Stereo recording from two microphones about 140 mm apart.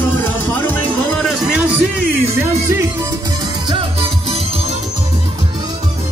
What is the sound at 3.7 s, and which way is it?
Music, 40° right (ahead or behind).